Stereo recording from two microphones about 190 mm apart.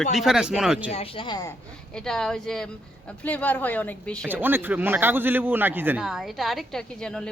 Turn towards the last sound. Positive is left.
turn(degrees=5)  # may be behind; listen again after turning